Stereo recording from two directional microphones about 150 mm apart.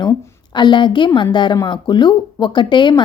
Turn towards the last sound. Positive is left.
turn(degrees=30)  # may be behind; listen again after turning